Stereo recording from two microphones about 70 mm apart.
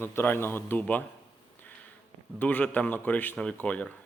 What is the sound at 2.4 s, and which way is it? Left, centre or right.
A man's voice, left.